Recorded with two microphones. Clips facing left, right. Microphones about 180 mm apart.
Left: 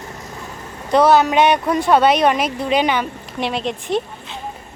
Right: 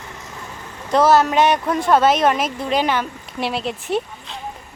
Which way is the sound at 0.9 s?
Centre (ahead or behind).